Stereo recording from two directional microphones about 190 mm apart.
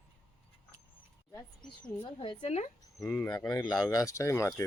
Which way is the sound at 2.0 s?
25° left (ahead or behind).